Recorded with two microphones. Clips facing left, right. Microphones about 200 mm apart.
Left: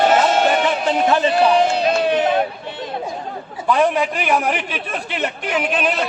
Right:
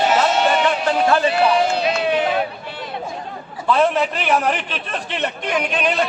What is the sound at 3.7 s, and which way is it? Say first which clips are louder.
A man's voice: even; 15° left (ahead or behind).